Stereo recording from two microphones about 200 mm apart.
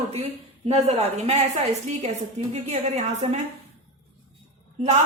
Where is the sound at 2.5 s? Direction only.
35° right (ahead or behind).